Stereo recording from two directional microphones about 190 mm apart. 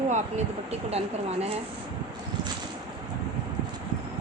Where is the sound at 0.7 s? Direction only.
35° right (ahead or behind).